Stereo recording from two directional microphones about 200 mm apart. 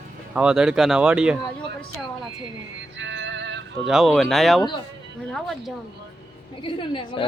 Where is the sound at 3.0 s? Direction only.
65° right (ahead or behind).